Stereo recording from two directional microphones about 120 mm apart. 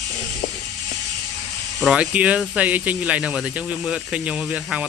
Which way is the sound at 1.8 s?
10° right (ahead or behind).